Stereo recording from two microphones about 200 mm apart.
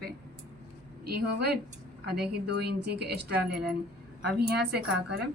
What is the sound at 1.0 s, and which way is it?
A woman's voice, 50° right (ahead or behind).